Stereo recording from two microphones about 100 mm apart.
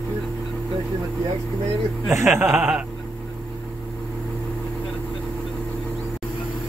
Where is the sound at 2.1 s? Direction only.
25° right (ahead or behind).